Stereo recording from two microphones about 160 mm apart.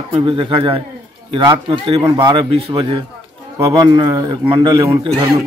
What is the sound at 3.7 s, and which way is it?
A man's voice, 25° right (ahead or behind).